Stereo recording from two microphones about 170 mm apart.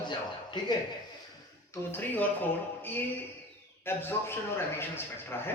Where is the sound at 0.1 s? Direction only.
25° left (ahead or behind).